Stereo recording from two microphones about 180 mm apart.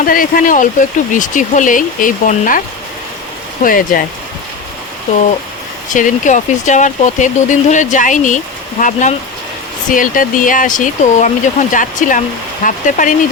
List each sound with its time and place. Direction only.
0.0 s speech: 50° left (ahead or behind)
3.6 s speech: 50° left (ahead or behind)
5.9 s speech: 45° left (ahead or behind)